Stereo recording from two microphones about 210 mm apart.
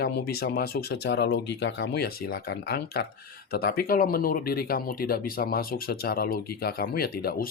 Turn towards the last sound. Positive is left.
turn(degrees=45)  # may be behind; listen again after turning